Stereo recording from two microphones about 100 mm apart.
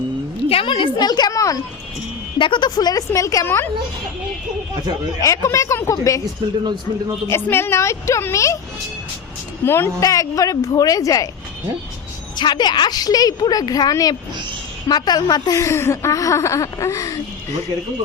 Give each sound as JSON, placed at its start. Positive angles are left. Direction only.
{"t": 0.4, "sound": "a woman's voice", "side_deg": 70}
{"t": 0.9, "sound": "speech", "side_deg": 45}
{"t": 2.4, "sound": "a woman's voice", "side_deg": 55}
{"t": 5.2, "sound": "speech", "side_deg": 30}
{"t": 7.4, "sound": "a woman's voice", "side_deg": 25}
{"t": 9.6, "sound": "a woman's voice", "side_deg": 25}
{"t": 10.0, "sound": "speech", "side_deg": 35}
{"t": 12.4, "sound": "speech", "side_deg": 45}